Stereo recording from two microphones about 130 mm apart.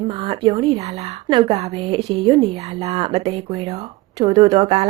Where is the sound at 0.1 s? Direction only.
40° right (ahead or behind).